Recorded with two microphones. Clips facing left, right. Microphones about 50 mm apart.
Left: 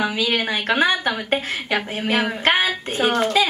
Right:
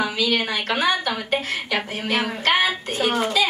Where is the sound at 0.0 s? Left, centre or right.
Left.